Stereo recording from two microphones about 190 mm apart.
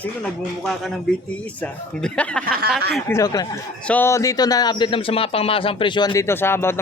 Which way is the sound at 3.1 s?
15° left (ahead or behind).